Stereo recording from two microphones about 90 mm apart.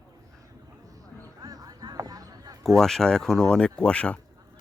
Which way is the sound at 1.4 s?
45° right (ahead or behind).